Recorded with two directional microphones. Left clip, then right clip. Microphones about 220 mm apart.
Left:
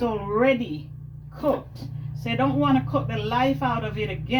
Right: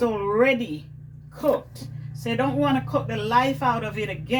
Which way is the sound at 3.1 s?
20° right (ahead or behind).